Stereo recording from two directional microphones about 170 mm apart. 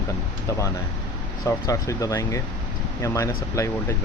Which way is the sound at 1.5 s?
20° left (ahead or behind).